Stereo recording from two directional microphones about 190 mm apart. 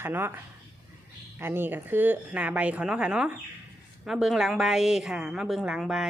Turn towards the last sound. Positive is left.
turn(degrees=-5)  # may be behind; listen again after turning